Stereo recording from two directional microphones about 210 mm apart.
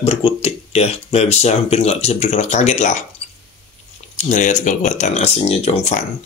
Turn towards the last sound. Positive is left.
turn(degrees=30)  # may be behind; listen again after turning